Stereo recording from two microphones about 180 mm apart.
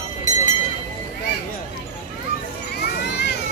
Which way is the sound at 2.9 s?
65° left (ahead or behind).